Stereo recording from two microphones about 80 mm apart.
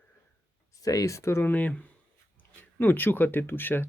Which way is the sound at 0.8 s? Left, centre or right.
Left.